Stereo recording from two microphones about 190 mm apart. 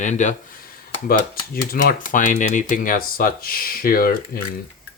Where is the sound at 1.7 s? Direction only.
45° left (ahead or behind).